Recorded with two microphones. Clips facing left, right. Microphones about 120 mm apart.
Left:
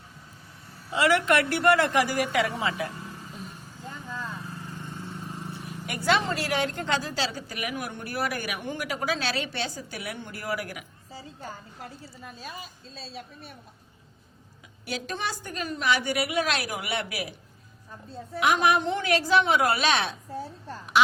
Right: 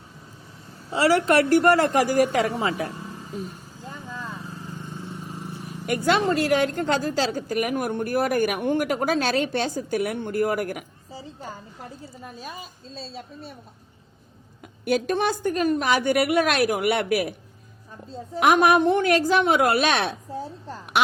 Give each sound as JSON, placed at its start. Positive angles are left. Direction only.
{"t": 0.9, "sound": "a woman's voice", "side_deg": -35}
{"t": 3.8, "sound": "vehicle", "side_deg": -15}
{"t": 5.5, "sound": "a woman's voice", "side_deg": -45}
{"t": 11.1, "sound": "a woman's voice", "side_deg": -20}
{"t": 12.2, "sound": "a woman's voice", "side_deg": -30}
{"t": 14.8, "sound": "a woman's voice", "side_deg": -50}
{"t": 18.3, "sound": "a woman's voice", "side_deg": -50}
{"t": 20.9, "sound": "a sound", "side_deg": -55}